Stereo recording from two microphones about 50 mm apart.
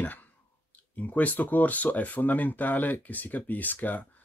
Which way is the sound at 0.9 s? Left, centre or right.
Left.